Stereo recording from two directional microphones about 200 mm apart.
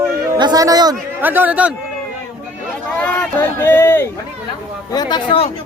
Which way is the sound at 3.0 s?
10° left (ahead or behind).